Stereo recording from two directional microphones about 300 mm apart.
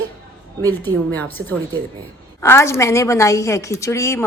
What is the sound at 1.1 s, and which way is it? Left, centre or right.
A woman's voice, centre.